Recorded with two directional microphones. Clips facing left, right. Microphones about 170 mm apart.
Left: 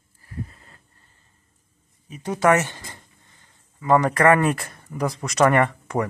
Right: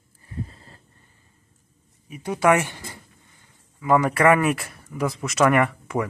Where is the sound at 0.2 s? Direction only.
25° right (ahead or behind).